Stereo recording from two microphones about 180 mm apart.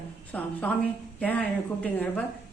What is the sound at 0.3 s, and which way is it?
A woman's voice, 10° left (ahead or behind).